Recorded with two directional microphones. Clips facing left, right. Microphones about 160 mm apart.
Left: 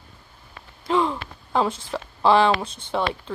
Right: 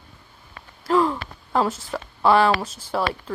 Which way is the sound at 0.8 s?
Centre (ahead or behind).